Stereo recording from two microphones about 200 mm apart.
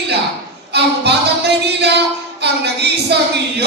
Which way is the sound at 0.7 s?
55° right (ahead or behind).